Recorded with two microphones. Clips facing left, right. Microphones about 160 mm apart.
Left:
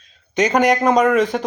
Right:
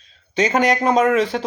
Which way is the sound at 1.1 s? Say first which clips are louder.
Left 1 dB; 45° left (ahead or behind).